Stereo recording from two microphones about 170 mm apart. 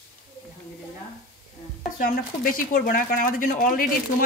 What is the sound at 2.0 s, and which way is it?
Speech, 60° left (ahead or behind).